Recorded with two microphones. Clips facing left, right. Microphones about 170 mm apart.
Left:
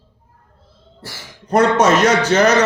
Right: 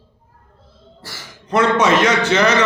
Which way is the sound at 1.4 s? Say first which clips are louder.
Left 2 dB; 40° left (ahead or behind).